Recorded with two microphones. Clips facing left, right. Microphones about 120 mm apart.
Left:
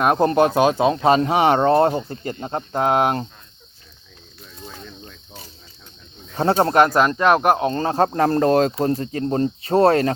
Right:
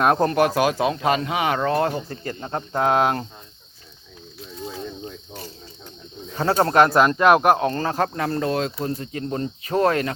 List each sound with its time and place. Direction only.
0.0 s speech: 10° left (ahead or behind)
0.3 s speech: 25° left (ahead or behind)
6.3 s speech: 30° left (ahead or behind)
7.2 s speech: 10° right (ahead or behind)
7.5 s speech: 20° left (ahead or behind)